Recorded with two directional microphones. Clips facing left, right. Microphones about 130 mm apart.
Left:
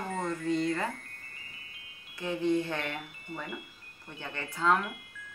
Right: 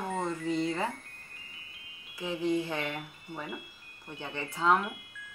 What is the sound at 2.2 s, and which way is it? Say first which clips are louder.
Speech: left 1 dB; 5° right (ahead or behind).